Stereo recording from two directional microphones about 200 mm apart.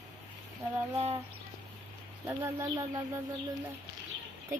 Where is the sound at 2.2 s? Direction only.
15° right (ahead or behind).